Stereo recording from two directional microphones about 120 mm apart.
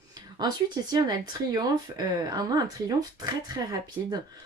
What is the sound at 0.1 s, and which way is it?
Speech, 35° right (ahead or behind).